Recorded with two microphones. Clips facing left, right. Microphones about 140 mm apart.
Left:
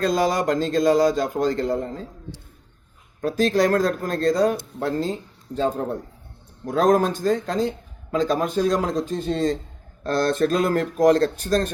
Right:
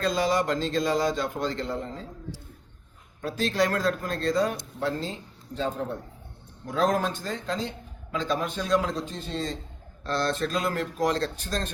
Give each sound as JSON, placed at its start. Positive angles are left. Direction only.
{"t": 0.0, "sound": "speech", "side_deg": 45}
{"t": 3.2, "sound": "speech", "side_deg": 45}